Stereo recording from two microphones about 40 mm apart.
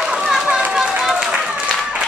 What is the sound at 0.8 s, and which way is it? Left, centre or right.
Run, centre.